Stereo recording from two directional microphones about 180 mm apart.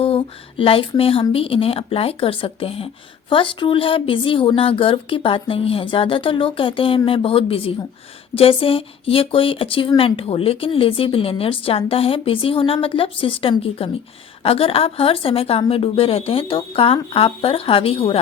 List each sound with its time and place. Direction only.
0.6 s speech: 30° left (ahead or behind)